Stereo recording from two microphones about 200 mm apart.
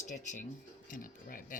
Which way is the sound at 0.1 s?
35° left (ahead or behind).